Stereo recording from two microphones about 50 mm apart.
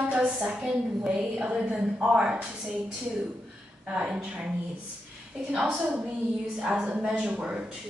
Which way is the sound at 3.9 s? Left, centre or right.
Right.